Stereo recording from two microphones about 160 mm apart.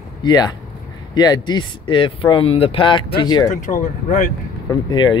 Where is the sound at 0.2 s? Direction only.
25° left (ahead or behind).